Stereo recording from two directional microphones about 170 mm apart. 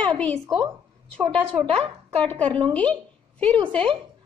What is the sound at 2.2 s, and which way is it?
A woman's voice, 5° left (ahead or behind).